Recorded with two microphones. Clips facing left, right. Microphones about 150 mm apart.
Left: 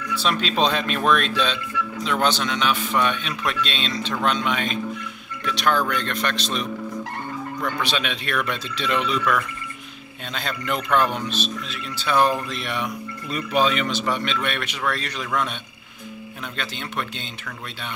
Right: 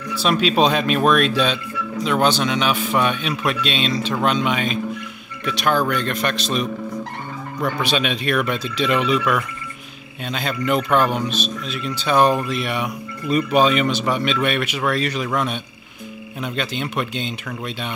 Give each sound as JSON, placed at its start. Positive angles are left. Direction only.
{"t": 0.2, "sound": "a man's voice", "side_deg": -10}
{"t": 16.5, "sound": "a man's voice", "side_deg": -15}